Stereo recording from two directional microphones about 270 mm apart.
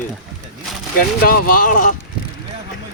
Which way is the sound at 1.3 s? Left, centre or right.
Left.